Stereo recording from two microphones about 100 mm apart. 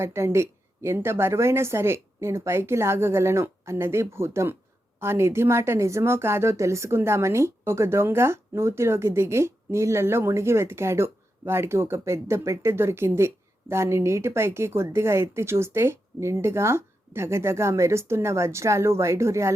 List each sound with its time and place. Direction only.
0.0 s speech: 25° right (ahead or behind)